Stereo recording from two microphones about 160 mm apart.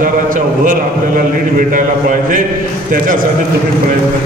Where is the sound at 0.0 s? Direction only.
55° right (ahead or behind).